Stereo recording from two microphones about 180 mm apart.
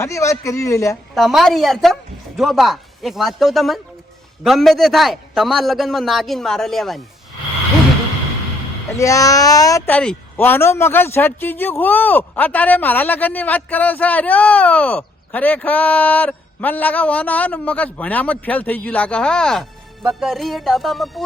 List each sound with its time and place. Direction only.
0.0 s speech: 15° left (ahead or behind)
1.1 s a woman's voice: centre (ahead or behind)
9.0 s speech: 20° left (ahead or behind); by 21.1 s centre (ahead or behind)